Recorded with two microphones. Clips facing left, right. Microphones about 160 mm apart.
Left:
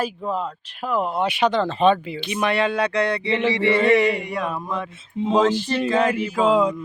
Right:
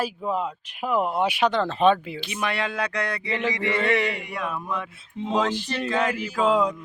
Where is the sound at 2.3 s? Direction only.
25° left (ahead or behind).